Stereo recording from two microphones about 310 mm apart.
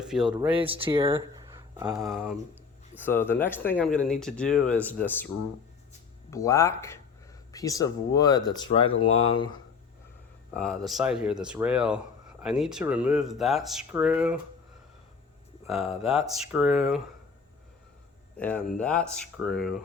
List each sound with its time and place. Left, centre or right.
0.0 s speech: centre
0.3 s speech: centre
2.0 s speech: centre
6.3 s speech: centre
10.5 s speech: centre
15.6 s speech: centre
18.3 s speech: centre